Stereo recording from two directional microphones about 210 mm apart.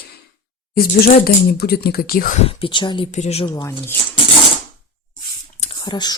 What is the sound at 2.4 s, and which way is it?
Speech, 25° left (ahead or behind).